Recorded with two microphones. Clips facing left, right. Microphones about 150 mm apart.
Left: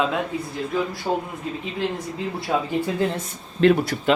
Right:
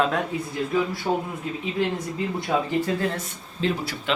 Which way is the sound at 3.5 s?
55° left (ahead or behind).